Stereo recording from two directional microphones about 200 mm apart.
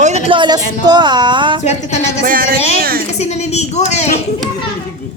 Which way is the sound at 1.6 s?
35° left (ahead or behind).